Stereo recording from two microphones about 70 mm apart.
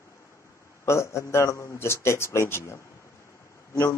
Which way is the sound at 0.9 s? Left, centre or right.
Left.